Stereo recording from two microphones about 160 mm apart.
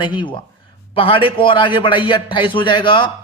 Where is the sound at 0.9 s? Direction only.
35° left (ahead or behind).